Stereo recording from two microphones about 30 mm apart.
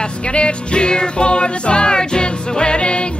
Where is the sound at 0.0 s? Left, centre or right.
Left.